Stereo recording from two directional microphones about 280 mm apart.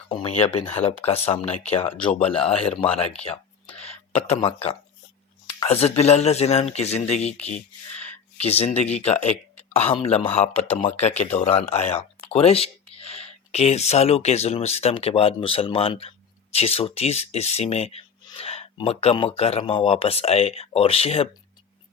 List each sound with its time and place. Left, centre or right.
0.1 s a man's voice: centre